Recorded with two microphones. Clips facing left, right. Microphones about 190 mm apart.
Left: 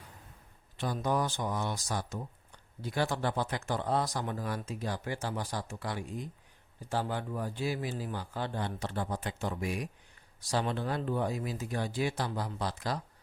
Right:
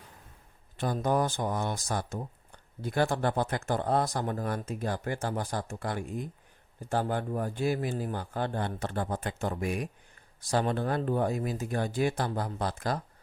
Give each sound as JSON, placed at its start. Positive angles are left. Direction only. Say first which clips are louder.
{"t": 0.8, "sound": "speech", "louder": "right 3 dB", "side_deg": -50}